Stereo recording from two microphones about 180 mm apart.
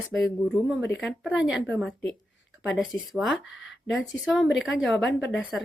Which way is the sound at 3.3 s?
90° left.